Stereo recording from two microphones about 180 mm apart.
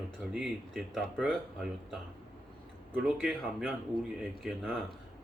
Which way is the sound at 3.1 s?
Centre (ahead or behind).